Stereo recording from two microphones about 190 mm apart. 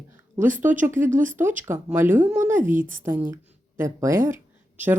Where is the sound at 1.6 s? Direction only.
10° right (ahead or behind).